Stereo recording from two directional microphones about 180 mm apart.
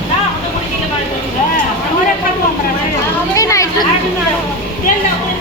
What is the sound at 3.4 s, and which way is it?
Speech, 20° left (ahead or behind).